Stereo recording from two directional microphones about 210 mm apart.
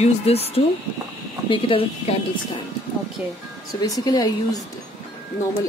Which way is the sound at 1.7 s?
25° left (ahead or behind).